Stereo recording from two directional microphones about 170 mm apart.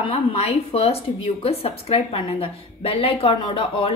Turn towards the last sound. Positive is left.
turn(degrees=30)  # may be behind; listen again after turning